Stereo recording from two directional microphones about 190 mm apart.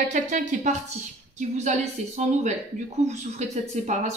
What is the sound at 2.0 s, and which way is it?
Speech, 35° right (ahead or behind).